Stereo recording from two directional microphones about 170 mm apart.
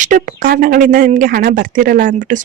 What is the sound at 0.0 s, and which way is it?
Speech, 55° right (ahead or behind).